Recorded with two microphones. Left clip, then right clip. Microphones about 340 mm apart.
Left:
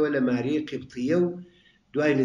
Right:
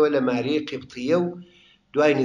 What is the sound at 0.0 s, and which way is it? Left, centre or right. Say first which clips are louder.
Speech: right 4 dB; centre.